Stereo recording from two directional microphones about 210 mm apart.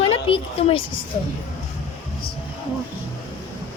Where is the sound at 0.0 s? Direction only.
30° left (ahead or behind).